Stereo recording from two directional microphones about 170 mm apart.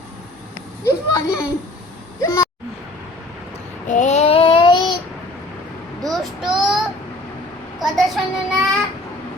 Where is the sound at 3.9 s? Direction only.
45° left (ahead or behind); by 5.0 s 25° left (ahead or behind).